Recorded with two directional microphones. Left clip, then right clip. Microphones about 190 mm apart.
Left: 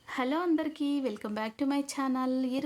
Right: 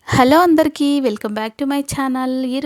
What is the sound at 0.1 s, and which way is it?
A woman's voice, 60° right (ahead or behind).